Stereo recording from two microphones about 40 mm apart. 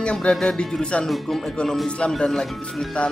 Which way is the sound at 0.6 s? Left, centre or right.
Left.